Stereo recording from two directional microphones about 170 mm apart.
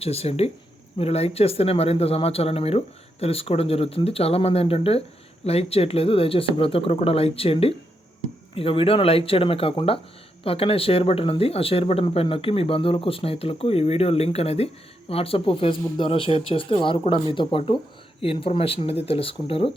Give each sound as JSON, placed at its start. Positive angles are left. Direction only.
{"t": 0.0, "sound": "speech", "side_deg": 35}